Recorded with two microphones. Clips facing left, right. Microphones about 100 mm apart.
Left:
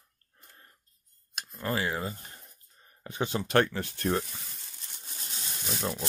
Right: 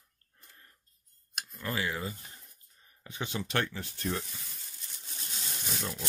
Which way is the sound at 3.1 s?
40° left (ahead or behind).